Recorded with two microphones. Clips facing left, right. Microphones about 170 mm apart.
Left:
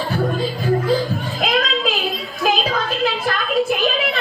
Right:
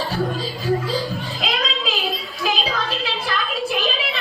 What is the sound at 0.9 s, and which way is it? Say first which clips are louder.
Child singing: left 5 dB; 50° left (ahead or behind).